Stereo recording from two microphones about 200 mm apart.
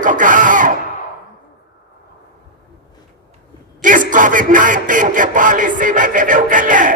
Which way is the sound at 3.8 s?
40° right (ahead or behind).